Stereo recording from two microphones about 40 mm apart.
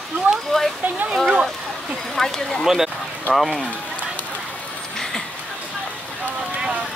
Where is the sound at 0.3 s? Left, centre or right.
Right.